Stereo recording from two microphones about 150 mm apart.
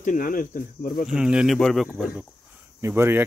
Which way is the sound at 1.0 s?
5° right (ahead or behind).